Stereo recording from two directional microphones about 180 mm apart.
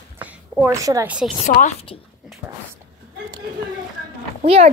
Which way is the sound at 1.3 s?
35° left (ahead or behind).